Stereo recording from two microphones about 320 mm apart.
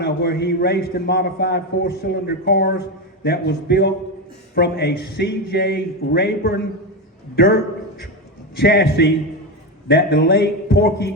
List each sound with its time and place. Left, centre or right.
0.0 s a man's voice: left